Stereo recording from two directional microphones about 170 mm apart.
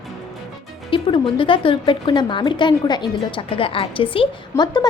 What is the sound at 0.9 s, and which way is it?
A woman's voice, 30° left (ahead or behind).